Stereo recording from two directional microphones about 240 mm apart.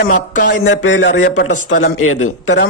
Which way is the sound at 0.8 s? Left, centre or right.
Left.